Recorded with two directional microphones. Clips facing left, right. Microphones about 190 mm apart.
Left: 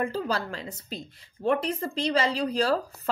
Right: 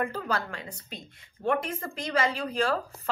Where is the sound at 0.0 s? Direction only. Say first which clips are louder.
Left 2 dB; 30° left (ahead or behind).